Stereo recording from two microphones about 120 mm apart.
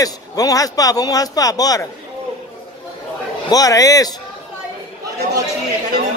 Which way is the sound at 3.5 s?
30° left (ahead or behind).